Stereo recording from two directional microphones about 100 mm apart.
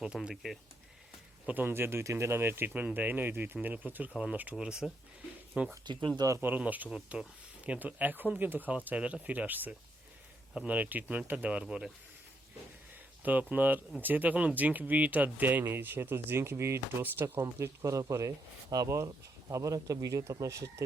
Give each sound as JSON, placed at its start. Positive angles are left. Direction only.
{"t": 0.0, "sound": "speech", "side_deg": -10}
{"t": 1.5, "sound": "speech", "side_deg": -20}
{"t": 5.8, "sound": "speech", "side_deg": -50}
{"t": 6.1, "sound": "speech", "side_deg": -35}
{"t": 6.4, "sound": "speech", "side_deg": -15}
{"t": 13.5, "sound": "speech", "side_deg": -15}